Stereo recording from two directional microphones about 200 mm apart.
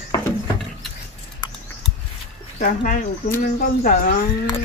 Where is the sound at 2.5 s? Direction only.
45° left (ahead or behind).